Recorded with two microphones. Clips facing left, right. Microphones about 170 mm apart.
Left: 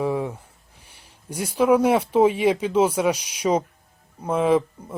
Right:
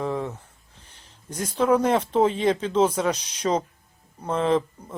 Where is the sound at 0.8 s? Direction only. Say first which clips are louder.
Even; 10° left (ahead or behind).